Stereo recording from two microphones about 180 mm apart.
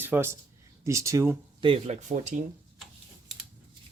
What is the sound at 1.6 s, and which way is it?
Speech, 35° right (ahead or behind).